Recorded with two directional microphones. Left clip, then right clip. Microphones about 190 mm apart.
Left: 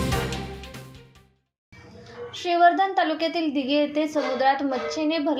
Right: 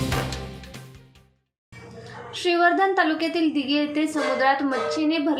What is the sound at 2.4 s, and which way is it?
A woman's voice, 25° left (ahead or behind).